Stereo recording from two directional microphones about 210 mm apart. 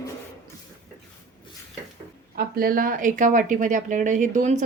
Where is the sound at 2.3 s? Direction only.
45° right (ahead or behind).